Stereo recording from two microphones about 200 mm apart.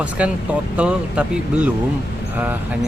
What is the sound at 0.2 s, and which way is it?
Speech, 5° right (ahead or behind).